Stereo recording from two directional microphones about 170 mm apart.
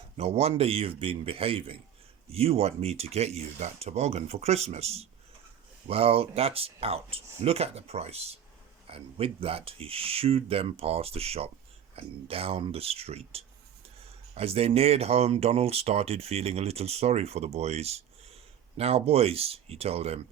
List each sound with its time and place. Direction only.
0.2 s speech: 35° right (ahead or behind)